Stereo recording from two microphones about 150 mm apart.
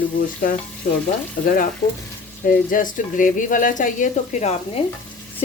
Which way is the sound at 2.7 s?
60° left (ahead or behind).